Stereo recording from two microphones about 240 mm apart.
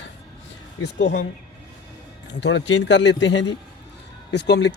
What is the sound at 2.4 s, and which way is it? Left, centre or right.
Speech, left.